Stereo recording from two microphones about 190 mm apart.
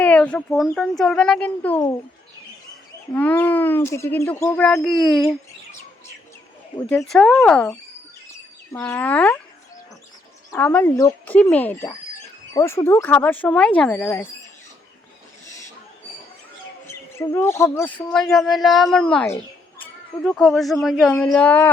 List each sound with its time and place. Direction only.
0.0 s speech: 5° left (ahead or behind)
3.1 s speech: 10° left (ahead or behind)
6.8 s speech: 5° left (ahead or behind)
10.5 s speech: 10° left (ahead or behind)
16.8 s speech: 15° left (ahead or behind)